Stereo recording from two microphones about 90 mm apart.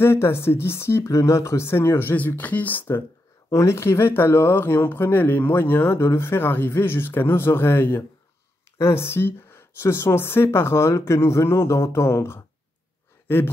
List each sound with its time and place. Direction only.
0.0 s speech: 25° left (ahead or behind)
3.4 s speech: 30° left (ahead or behind)